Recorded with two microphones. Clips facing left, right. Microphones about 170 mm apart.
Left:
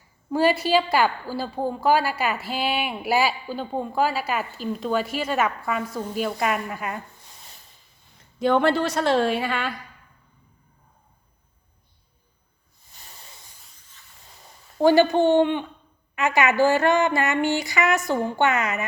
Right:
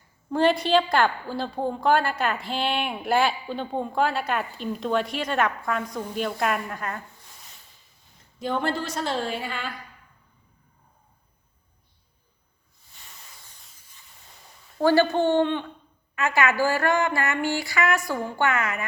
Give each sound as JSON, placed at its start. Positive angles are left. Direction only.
{"t": 0.3, "sound": "a woman's voice", "side_deg": 5}
{"t": 8.4, "sound": "a woman's voice", "side_deg": 75}
{"t": 14.8, "sound": "speech", "side_deg": 15}
{"t": 16.1, "sound": "a sound", "side_deg": 20}